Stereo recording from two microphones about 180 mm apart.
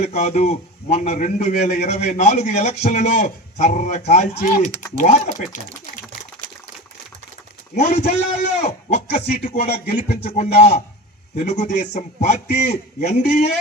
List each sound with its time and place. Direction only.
0.1 s a man's voice: 40° left (ahead or behind)
7.8 s a man's voice: 40° left (ahead or behind)